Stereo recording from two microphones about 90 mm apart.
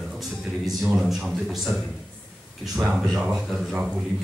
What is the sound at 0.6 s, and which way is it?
Speech, 5° right (ahead or behind).